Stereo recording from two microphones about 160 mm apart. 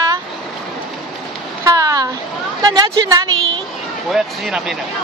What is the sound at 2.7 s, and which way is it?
Speech, 25° right (ahead or behind).